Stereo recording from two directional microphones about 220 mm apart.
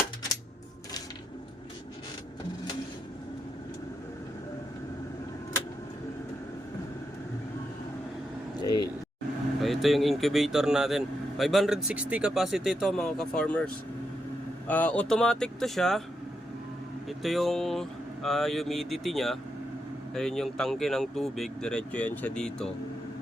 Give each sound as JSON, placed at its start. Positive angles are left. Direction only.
{"t": 8.5, "sound": "a sound", "side_deg": 20}
{"t": 9.6, "sound": "speech", "side_deg": 0}
{"t": 14.7, "sound": "speech", "side_deg": 5}
{"t": 17.1, "sound": "speech", "side_deg": 0}